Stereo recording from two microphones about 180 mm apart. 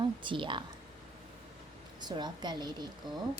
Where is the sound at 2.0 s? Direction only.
25° right (ahead or behind).